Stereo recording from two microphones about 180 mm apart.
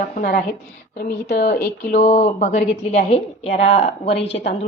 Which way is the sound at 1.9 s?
35° left (ahead or behind).